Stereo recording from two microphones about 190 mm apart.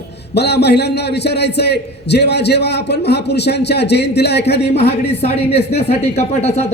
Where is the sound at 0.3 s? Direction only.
60° left (ahead or behind).